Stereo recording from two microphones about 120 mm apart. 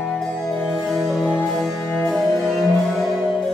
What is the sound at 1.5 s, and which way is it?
Music, centre (ahead or behind).